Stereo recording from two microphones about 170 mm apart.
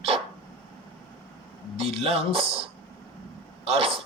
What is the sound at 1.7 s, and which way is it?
Speech, 35° right (ahead or behind).